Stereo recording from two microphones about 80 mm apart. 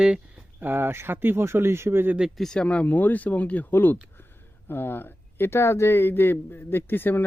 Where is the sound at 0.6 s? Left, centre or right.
Right.